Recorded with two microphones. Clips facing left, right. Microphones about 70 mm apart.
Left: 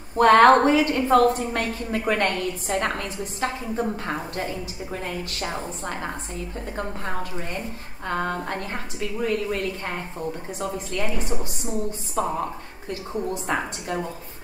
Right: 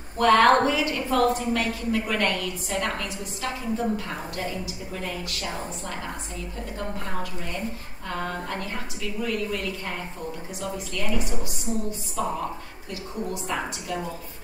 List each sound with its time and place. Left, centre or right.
0.2 s a woman's voice: left
8.1 s a woman's voice: left
12.2 s a woman's voice: left